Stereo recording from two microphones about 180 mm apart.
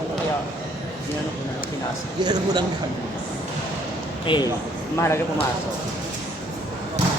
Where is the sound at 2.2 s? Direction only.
25° right (ahead or behind).